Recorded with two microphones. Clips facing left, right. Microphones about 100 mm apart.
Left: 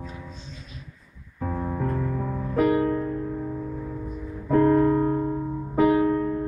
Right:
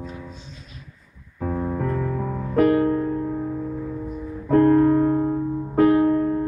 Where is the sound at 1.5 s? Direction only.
15° right (ahead or behind).